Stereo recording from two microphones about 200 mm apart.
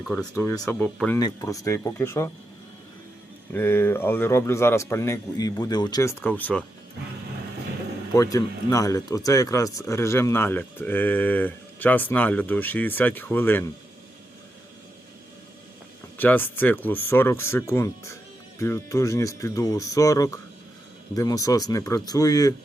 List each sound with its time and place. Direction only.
0.0 s speech: 5° left (ahead or behind)
0.3 s speech: 15° left (ahead or behind)
1.2 s speech: 20° left (ahead or behind)
3.5 s speech: 10° left (ahead or behind)
8.1 s speech: 15° left (ahead or behind)
16.1 s speech: 10° left (ahead or behind)